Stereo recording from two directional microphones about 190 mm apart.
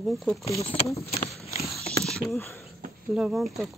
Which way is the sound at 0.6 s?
35° left (ahead or behind).